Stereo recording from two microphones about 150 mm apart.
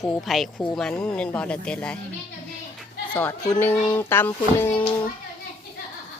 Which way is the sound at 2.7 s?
10° left (ahead or behind).